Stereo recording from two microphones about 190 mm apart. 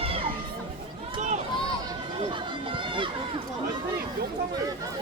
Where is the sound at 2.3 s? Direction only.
25° right (ahead or behind).